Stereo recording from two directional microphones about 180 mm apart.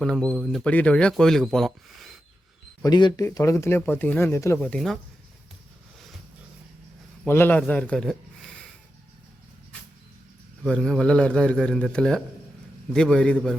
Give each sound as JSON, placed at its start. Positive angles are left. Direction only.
{"t": 0.0, "sound": "speech", "side_deg": 5}
{"t": 2.8, "sound": "speech", "side_deg": 25}
{"t": 4.6, "sound": "speech", "side_deg": 5}
{"t": 7.3, "sound": "speech", "side_deg": 10}
{"t": 10.6, "sound": "speech", "side_deg": 5}